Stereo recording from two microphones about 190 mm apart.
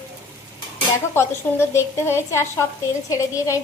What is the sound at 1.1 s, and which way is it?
A woman's voice, 15° left (ahead or behind).